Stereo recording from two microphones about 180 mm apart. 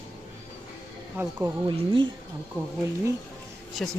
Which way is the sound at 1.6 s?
30° right (ahead or behind).